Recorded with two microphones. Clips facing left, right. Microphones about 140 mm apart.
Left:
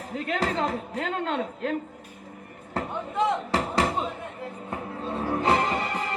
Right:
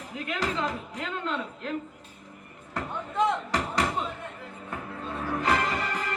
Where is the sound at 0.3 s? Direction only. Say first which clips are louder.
Left 3 dB; 35° left (ahead or behind).